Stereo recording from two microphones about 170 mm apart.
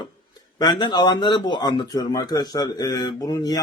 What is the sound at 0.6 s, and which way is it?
Speech, 25° left (ahead or behind).